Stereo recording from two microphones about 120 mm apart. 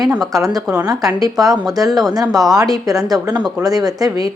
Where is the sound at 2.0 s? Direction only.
30° right (ahead or behind).